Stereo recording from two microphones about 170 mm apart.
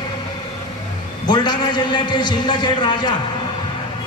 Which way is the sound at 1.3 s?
25° left (ahead or behind).